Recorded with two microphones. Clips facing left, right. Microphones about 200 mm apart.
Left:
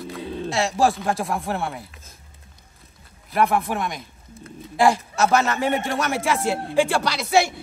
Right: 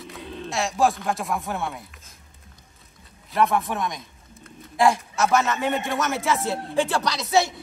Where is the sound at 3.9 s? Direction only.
30° left (ahead or behind).